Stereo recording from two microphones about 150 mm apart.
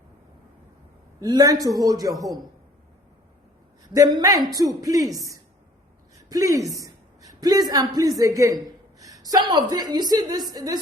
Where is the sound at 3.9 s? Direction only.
25° right (ahead or behind).